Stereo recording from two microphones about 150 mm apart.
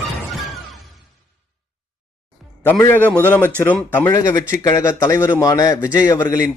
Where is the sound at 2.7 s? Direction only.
10° left (ahead or behind).